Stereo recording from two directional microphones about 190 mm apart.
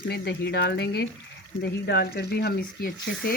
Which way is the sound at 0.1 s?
60° left (ahead or behind).